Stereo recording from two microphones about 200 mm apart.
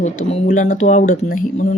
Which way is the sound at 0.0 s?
35° left (ahead or behind).